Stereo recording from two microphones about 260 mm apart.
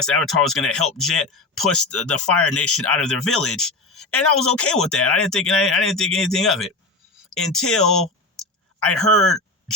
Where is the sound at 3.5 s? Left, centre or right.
Left.